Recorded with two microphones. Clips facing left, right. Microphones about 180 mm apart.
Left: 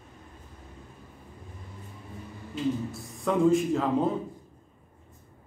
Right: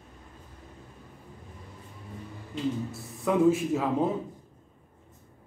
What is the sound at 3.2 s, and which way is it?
Speech, 5° right (ahead or behind).